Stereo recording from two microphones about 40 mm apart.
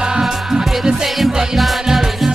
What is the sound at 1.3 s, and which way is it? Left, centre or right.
Music, centre.